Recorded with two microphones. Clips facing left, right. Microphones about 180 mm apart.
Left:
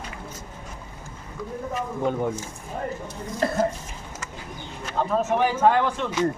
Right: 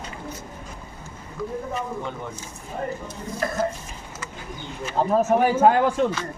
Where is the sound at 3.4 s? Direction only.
30° left (ahead or behind).